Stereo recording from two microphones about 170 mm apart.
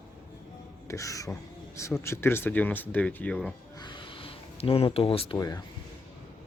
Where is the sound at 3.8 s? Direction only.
25° left (ahead or behind).